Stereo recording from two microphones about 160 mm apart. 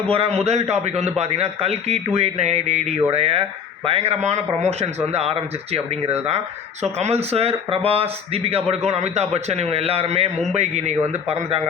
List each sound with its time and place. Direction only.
0.0 s a man's voice: 35° right (ahead or behind)